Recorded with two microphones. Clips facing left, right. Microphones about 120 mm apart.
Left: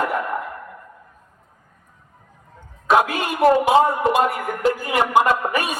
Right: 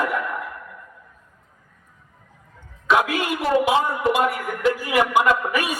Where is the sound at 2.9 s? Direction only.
45° left (ahead or behind).